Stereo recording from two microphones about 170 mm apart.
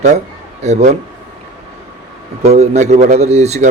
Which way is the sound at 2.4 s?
40° right (ahead or behind).